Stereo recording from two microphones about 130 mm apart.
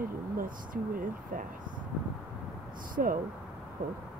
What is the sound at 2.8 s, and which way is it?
Speech, 90° right.